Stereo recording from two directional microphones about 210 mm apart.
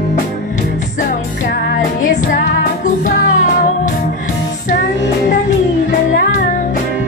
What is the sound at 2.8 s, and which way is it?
Music, 40° left (ahead or behind).